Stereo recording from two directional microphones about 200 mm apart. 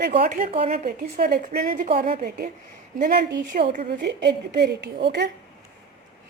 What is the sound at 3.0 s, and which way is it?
Speech, 55° right (ahead or behind).